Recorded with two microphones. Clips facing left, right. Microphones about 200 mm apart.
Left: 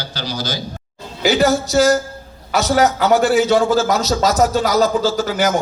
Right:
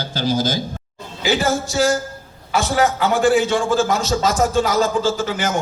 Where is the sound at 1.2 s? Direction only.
40° left (ahead or behind).